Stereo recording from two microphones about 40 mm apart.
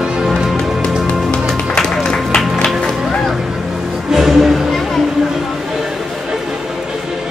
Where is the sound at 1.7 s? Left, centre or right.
Centre.